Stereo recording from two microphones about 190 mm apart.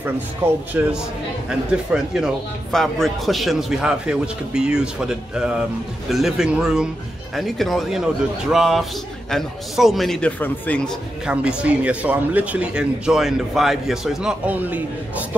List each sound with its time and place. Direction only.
0.4 s speech: 15° right (ahead or behind)
1.9 s a man's voice: centre (ahead or behind)